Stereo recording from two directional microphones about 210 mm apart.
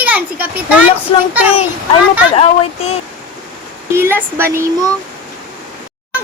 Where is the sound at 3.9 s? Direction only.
10° right (ahead or behind).